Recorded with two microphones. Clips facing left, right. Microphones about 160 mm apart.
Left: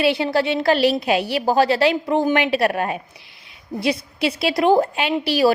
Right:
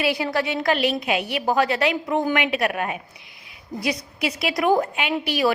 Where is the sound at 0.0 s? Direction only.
30° left (ahead or behind).